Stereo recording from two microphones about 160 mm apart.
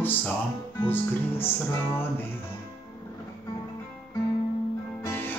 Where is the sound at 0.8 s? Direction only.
15° left (ahead or behind).